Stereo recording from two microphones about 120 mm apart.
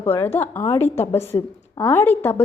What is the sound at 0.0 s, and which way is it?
A woman's voice, 20° left (ahead or behind).